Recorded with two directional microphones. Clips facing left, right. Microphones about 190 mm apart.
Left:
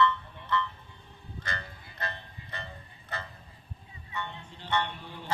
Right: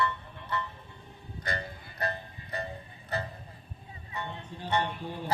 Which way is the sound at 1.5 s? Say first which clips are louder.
Right 5 dB; 35° right (ahead or behind).